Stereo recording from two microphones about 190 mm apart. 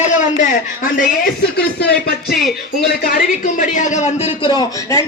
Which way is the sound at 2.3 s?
Centre (ahead or behind).